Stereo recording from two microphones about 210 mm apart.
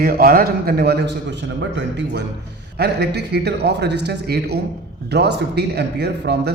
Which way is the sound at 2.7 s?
50° right (ahead or behind).